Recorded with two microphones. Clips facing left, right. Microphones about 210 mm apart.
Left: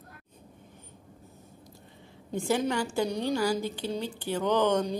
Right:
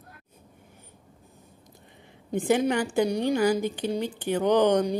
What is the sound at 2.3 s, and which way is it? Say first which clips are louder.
A woman's voice: right 4 dB; 15° right (ahead or behind).